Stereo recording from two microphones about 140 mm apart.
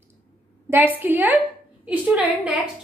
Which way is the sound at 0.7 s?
15° right (ahead or behind).